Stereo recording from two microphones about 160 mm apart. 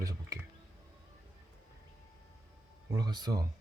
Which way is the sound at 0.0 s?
20° right (ahead or behind).